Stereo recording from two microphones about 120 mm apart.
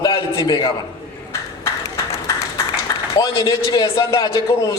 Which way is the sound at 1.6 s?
25° left (ahead or behind).